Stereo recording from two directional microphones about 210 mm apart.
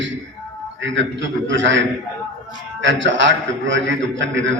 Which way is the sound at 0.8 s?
60° right (ahead or behind).